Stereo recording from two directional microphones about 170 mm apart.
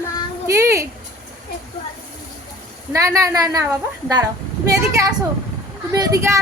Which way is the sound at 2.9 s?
20° right (ahead or behind).